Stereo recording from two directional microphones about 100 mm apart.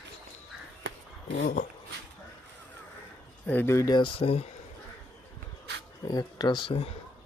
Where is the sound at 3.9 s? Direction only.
55° left (ahead or behind).